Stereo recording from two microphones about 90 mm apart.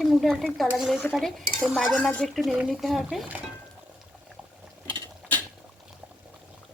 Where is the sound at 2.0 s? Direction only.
15° left (ahead or behind).